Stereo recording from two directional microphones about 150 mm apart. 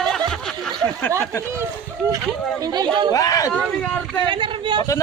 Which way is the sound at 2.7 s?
30° right (ahead or behind).